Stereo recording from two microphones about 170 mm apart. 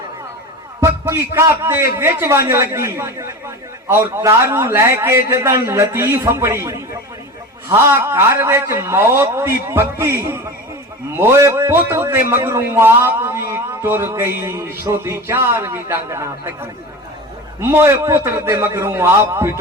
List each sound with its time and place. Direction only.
0.8 s a man's voice: 15° right (ahead or behind)